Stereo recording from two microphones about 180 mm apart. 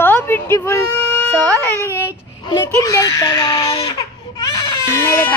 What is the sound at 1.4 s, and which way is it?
Speech, 20° right (ahead or behind).